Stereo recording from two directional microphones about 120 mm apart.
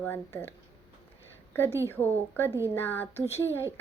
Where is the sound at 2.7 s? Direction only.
15° left (ahead or behind).